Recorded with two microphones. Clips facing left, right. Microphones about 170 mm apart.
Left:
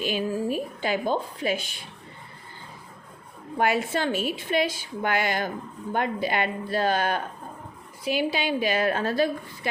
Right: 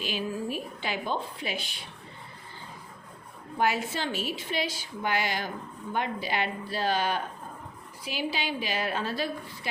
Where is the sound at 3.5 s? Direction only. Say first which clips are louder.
Left 4 dB; 55° left (ahead or behind).